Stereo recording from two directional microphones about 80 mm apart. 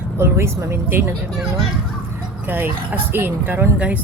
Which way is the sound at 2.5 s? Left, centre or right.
Right.